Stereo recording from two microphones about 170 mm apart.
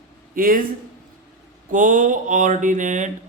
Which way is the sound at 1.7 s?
50° right (ahead or behind).